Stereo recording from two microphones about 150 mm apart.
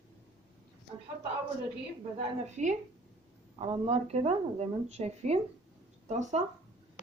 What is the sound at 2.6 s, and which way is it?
Speech, 50° right (ahead or behind).